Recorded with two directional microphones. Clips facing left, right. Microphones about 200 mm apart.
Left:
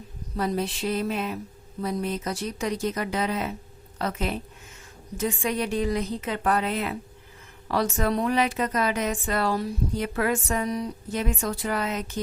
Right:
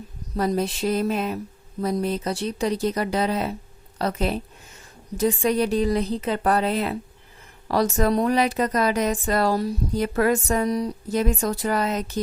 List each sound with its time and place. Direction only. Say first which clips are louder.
0.3 s a woman's voice: right 4 dB; 40° right (ahead or behind)